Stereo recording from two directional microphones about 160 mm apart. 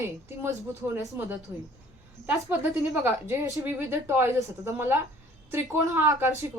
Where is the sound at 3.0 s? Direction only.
20° right (ahead or behind).